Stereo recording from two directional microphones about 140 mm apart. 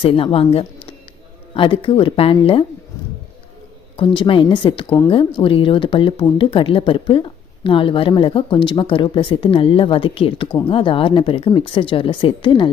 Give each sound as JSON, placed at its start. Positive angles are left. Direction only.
{"t": 0.0, "sound": "speech", "side_deg": 40}
{"t": 3.9, "sound": "speech", "side_deg": 35}